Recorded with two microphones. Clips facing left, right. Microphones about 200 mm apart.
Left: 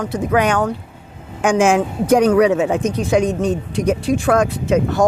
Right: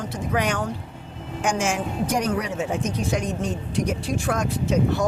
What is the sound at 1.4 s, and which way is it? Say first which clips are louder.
A woman's voice: left 10 dB; 90° left.